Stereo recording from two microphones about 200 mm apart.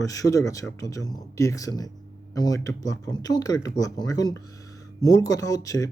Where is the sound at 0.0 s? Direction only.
15° left (ahead or behind).